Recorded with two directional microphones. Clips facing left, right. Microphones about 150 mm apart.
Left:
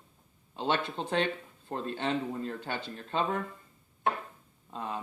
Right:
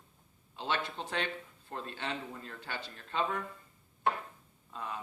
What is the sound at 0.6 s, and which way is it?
Speech, 30° left (ahead or behind).